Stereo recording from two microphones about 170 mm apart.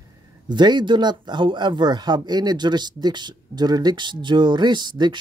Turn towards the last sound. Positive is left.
turn(degrees=-25)  # may be behind; listen again after turning